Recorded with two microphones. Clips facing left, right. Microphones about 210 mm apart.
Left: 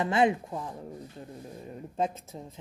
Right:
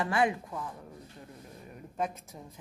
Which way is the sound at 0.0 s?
20° left (ahead or behind).